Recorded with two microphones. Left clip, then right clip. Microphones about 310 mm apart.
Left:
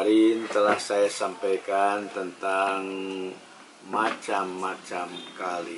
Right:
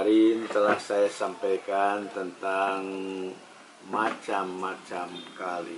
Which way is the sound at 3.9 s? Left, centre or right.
Centre.